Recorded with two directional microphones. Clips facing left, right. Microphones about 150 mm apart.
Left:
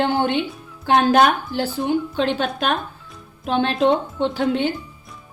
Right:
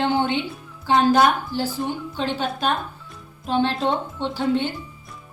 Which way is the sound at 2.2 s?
65° left (ahead or behind).